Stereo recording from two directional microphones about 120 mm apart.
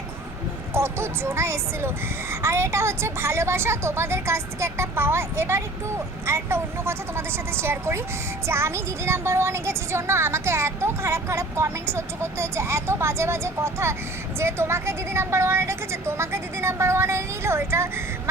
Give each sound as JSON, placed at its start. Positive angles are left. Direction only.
{"t": 0.7, "sound": "speech", "side_deg": -20}